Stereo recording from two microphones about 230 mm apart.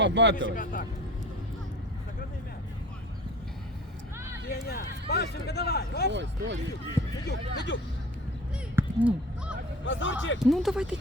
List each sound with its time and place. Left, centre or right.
0.0 s speech: right
0.4 s a man's voice: left
4.4 s speech: left
6.1 s speech: right
7.3 s speech: left
8.7 s a sound: centre
9.8 s speech: left
10.4 s speech: centre